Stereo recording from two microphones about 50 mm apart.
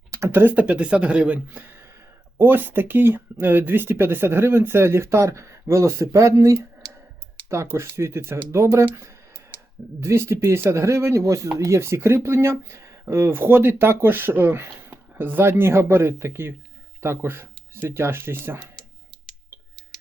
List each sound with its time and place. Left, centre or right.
0.3 s speech: right
0.5 s speech: right
2.4 s speech: right
7.5 s speech: right
8.5 s speech: right
10.0 s speech: right
10.3 s speech: right